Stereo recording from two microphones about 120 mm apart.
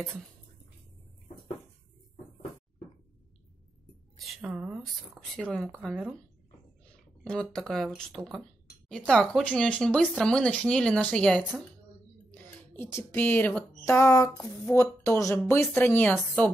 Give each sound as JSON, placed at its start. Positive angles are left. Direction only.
{"t": 4.4, "sound": "a woman's voice", "side_deg": -10}
{"t": 5.1, "sound": "speech", "side_deg": 5}
{"t": 12.7, "sound": "speech", "side_deg": 20}